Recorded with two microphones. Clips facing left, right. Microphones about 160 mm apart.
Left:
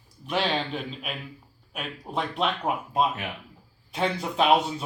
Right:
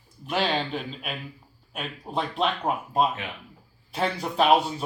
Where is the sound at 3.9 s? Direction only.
Centre (ahead or behind).